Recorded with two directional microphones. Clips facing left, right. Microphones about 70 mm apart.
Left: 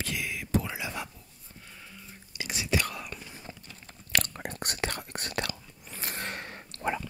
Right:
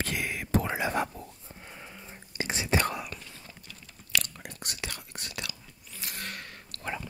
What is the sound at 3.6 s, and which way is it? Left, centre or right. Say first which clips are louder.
Whispering: left 1 dB; left.